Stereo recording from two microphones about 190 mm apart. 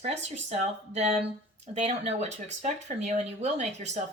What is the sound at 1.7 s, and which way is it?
Speech, 35° right (ahead or behind).